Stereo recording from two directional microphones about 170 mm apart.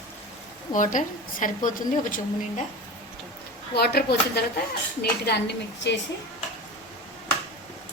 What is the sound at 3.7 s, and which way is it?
Speech, 65° left (ahead or behind).